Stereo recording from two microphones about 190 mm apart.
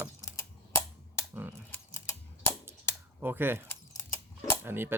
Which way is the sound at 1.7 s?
15° left (ahead or behind).